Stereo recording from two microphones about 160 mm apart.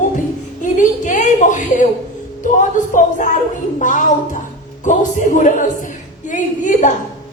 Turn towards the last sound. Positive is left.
turn(degrees=50)  # may be behind; listen again after turning